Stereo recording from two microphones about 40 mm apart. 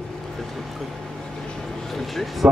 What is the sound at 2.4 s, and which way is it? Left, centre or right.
Speech, right.